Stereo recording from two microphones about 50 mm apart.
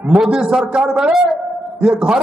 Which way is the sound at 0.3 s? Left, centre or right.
Centre.